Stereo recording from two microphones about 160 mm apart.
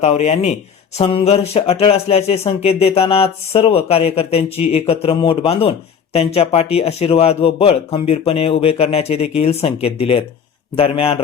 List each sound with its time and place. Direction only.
0.0 s speech: 45° left (ahead or behind)